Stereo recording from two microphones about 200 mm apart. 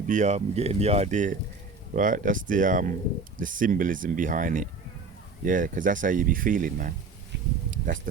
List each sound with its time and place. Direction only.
0.1 s speech: 35° right (ahead or behind)
8.1 s speech: 45° right (ahead or behind)